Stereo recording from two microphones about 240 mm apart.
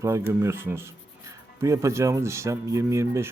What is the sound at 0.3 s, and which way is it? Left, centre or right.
Speech, centre.